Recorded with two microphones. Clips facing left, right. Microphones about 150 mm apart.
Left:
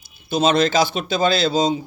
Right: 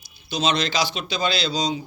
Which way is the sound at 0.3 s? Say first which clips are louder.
Left 6 dB; 50° left (ahead or behind).